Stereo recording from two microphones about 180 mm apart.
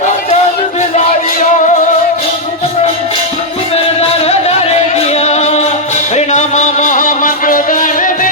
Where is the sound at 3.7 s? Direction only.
35° left (ahead or behind).